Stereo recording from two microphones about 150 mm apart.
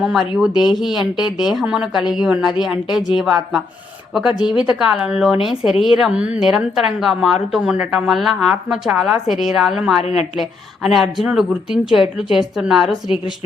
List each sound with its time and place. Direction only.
0.0 s speech: centre (ahead or behind)
10.0 s a woman's voice: 45° left (ahead or behind)
10.3 s speech: centre (ahead or behind)